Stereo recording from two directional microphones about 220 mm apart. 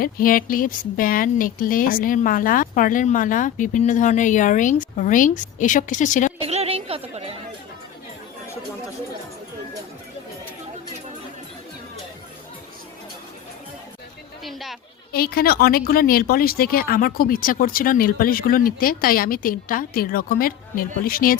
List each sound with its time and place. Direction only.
0.0 s speech: 40° left (ahead or behind)
6.4 s chatter: 25° right (ahead or behind)
14.4 s a sound: centre (ahead or behind)
15.1 s speech: 45° left (ahead or behind)